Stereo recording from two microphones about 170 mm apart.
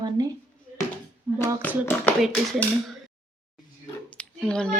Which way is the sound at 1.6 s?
10° left (ahead or behind).